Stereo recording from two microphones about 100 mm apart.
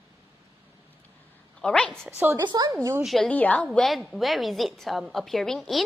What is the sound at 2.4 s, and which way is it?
Speech, 45° right (ahead or behind).